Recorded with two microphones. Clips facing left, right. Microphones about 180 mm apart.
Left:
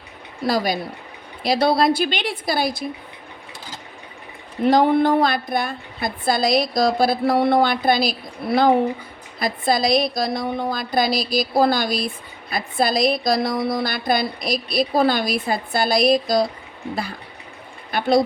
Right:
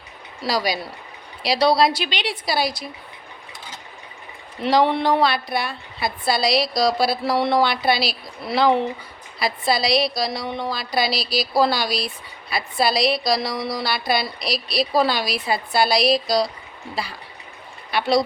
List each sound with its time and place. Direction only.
0.4 s a woman's voice: 50° left (ahead or behind)
4.6 s a woman's voice: 50° left (ahead or behind)